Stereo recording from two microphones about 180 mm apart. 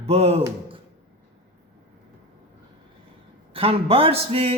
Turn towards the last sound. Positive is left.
turn(degrees=-35)  # may be behind; listen again after turning